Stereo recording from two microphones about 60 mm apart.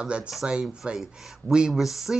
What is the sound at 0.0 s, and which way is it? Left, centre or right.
Speech, centre.